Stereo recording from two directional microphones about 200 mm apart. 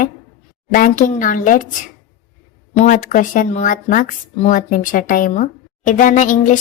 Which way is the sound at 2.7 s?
40° left (ahead or behind).